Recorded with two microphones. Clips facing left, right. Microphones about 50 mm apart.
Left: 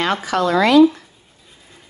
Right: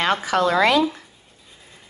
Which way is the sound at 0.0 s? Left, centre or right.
Right.